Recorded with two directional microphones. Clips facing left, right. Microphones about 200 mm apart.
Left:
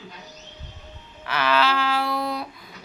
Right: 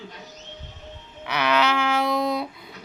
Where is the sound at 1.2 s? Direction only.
15° right (ahead or behind).